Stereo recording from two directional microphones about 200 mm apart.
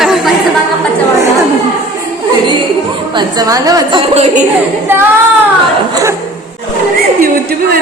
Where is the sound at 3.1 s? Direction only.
20° right (ahead or behind).